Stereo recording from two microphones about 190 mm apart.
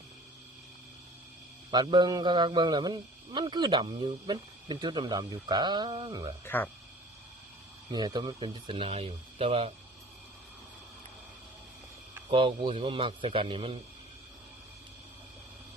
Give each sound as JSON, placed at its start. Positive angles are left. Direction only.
{"t": 1.7, "sound": "a man's voice", "side_deg": -20}
{"t": 6.4, "sound": "speech", "side_deg": 10}
{"t": 7.9, "sound": "a man's voice", "side_deg": -20}
{"t": 12.3, "sound": "a man's voice", "side_deg": -30}